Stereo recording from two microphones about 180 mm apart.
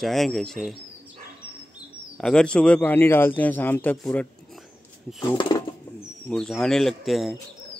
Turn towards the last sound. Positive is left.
turn(degrees=0)  # may be behind; listen again after turning